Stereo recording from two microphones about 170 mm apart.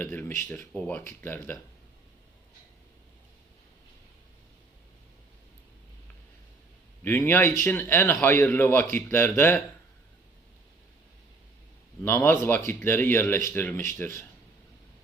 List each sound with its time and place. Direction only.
0.0 s speech: 10° left (ahead or behind)
7.0 s speech: 10° left (ahead or behind)
12.0 s speech: 15° left (ahead or behind)